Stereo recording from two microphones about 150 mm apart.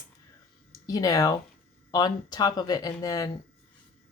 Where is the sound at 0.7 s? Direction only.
25° left (ahead or behind).